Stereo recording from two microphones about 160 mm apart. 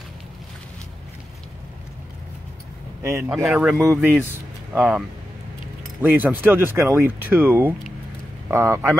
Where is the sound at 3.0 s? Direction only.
15° right (ahead or behind).